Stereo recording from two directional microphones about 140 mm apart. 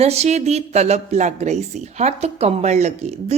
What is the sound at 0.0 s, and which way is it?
A woman's voice, 50° right (ahead or behind).